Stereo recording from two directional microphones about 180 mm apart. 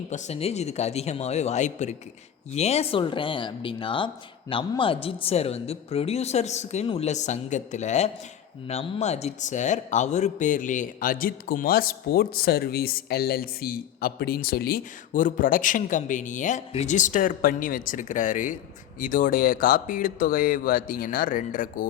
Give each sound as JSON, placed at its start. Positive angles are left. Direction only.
{"t": 0.1, "sound": "speech", "side_deg": 40}